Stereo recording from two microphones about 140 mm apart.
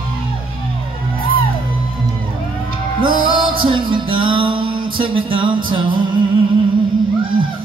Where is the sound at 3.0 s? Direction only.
35° right (ahead or behind).